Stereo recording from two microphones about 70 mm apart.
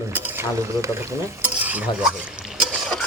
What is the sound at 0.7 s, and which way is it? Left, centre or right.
Speech, right.